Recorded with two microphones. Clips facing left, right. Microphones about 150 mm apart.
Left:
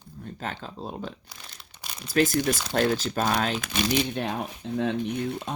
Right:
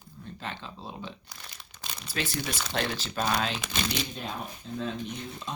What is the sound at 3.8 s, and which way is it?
Speech, 70° left (ahead or behind).